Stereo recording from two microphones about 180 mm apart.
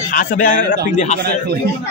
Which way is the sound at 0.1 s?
50° left (ahead or behind).